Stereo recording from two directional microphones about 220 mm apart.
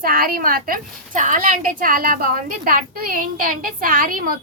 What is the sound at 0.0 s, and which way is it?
A woman's voice, 45° right (ahead or behind).